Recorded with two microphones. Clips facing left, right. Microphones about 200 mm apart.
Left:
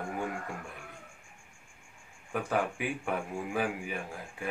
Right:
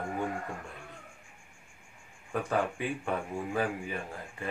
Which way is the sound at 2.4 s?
10° left (ahead or behind).